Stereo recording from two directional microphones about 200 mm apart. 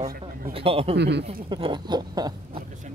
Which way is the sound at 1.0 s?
60° right (ahead or behind).